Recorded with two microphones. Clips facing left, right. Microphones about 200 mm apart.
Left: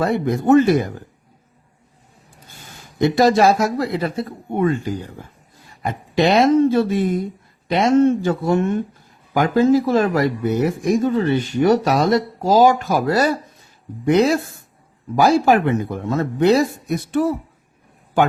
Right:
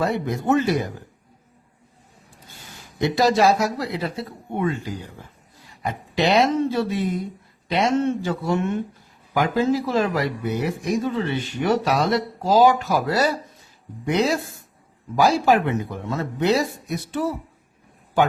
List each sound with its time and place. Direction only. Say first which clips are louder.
0.0 s speech: left 5 dB; 50° left (ahead or behind)
3.0 s speech: left 4 dB; 50° left (ahead or behind)
5.8 s speech: left 4 dB; 50° left (ahead or behind)
15.1 s speech: left 3 dB; 50° left (ahead or behind)